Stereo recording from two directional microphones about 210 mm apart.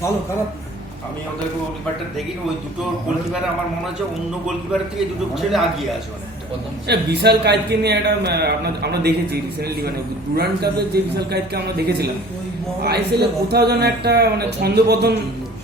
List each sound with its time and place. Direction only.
5.3 s a man's voice: centre (ahead or behind)
6.8 s a man's voice: 50° right (ahead or behind)